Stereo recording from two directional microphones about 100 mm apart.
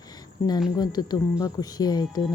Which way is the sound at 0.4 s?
35° left (ahead or behind).